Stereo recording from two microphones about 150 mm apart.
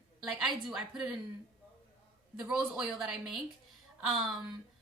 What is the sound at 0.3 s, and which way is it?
Speech, centre (ahead or behind).